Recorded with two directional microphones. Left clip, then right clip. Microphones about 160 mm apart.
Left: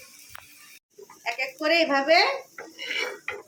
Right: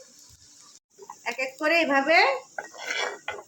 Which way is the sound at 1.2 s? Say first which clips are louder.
Even; 30° right (ahead or behind).